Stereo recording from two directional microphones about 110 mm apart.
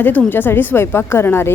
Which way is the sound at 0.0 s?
15° left (ahead or behind).